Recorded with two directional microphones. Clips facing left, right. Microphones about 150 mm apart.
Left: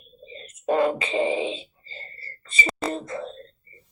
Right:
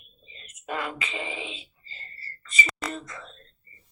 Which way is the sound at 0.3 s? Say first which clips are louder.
Left 11 dB; 30° left (ahead or behind).